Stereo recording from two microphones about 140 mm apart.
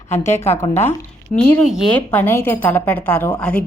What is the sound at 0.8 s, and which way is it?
A woman's voice, 15° left (ahead or behind).